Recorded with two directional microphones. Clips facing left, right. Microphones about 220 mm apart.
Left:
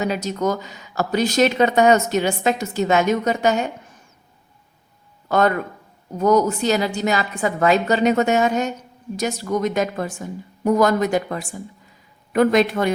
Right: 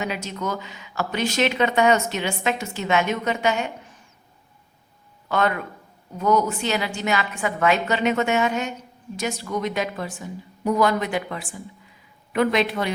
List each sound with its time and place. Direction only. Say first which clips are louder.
0.0 s speech: left 6 dB; 40° left (ahead or behind)
5.3 s a woman's voice: left 5 dB; 45° left (ahead or behind)